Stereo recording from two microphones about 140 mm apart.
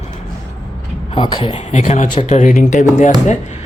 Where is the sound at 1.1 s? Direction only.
35° left (ahead or behind).